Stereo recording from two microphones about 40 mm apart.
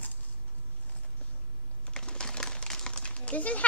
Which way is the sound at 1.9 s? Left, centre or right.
Left.